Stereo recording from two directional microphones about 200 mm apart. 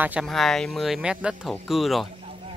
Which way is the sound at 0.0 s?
5° right (ahead or behind).